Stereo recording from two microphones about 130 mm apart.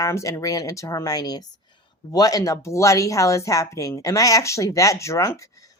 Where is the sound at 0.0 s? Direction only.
25° left (ahead or behind).